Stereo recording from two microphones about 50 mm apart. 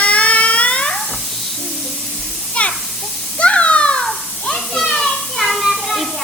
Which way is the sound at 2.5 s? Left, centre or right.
Left.